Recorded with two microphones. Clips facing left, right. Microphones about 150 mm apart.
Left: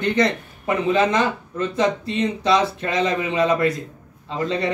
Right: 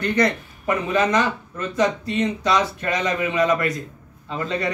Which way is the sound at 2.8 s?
25° left (ahead or behind).